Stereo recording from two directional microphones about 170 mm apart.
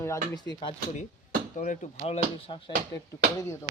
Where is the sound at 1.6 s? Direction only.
45° left (ahead or behind).